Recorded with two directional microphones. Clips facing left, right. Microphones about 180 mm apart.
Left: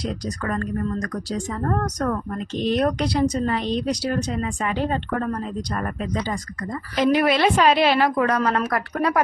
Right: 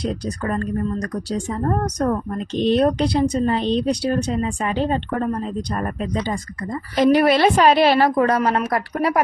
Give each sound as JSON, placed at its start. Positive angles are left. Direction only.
{"t": 0.3, "sound": "a woman's voice", "side_deg": -30}
{"t": 1.7, "sound": "speech", "side_deg": -15}
{"t": 6.9, "sound": "a woman's voice", "side_deg": -40}